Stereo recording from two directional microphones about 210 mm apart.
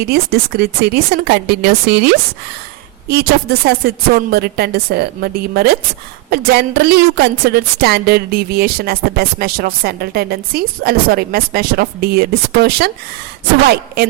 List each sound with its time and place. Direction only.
0.0 s a woman's voice: 50° right (ahead or behind)